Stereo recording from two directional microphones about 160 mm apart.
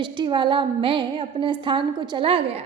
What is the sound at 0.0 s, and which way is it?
A woman's voice, 30° right (ahead or behind).